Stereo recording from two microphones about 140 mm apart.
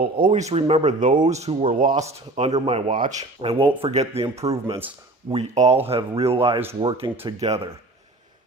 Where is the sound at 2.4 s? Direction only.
50° right (ahead or behind).